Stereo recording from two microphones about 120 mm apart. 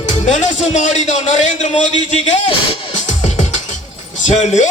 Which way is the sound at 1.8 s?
90° left.